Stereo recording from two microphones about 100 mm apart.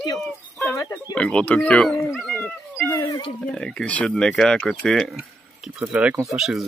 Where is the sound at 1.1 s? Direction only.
10° left (ahead or behind).